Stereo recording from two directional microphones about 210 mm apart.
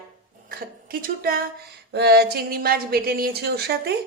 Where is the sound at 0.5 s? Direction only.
45° right (ahead or behind).